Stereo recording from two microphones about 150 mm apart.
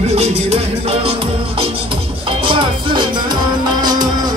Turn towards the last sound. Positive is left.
turn(degrees=-25)  # may be behind; listen again after turning